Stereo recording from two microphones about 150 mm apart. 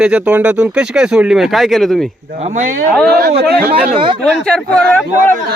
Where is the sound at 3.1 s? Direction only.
90° right.